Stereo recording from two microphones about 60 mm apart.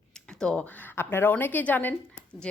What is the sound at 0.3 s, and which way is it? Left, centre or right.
Speech, centre.